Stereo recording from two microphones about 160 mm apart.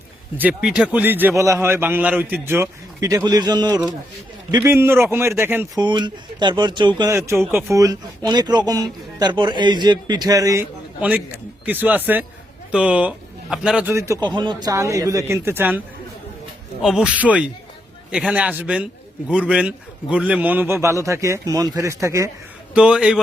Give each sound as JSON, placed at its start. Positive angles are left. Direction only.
{"t": 0.3, "sound": "a man's voice", "side_deg": -5}
{"t": 4.5, "sound": "a man's voice", "side_deg": -15}
{"t": 5.8, "sound": "speech", "side_deg": -30}
{"t": 7.1, "sound": "a man's voice", "side_deg": -15}
{"t": 13.9, "sound": "speech", "side_deg": -20}
{"t": 16.8, "sound": "a man's voice", "side_deg": -5}
{"t": 22.7, "sound": "a man's voice", "side_deg": -5}